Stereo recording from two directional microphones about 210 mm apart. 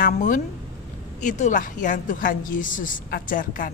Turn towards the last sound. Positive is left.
turn(degrees=40)  # may be behind; listen again after turning